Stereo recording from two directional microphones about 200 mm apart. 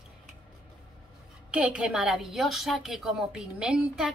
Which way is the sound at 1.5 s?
5° right (ahead or behind).